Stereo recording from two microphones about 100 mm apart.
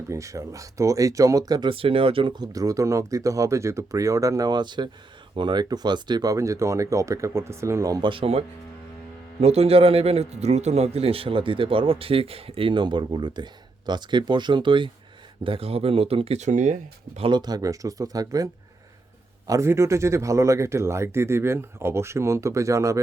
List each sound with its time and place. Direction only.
0.1 s speech: 30° right (ahead or behind)
1.7 s a man's voice: 65° right (ahead or behind)
2.3 s speech: 40° right (ahead or behind)
6.3 s speech: 30° right (ahead or behind)
8.0 s speech: 65° right (ahead or behind)
9.4 s a man's voice: 90° right; by 14.8 s 55° right (ahead or behind)
15.4 s speech: 70° right (ahead or behind)
17.3 s speech: 45° right (ahead or behind)
19.5 s speech: 30° right (ahead or behind)